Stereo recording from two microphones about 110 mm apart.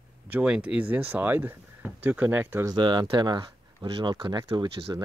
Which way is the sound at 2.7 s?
40° right (ahead or behind).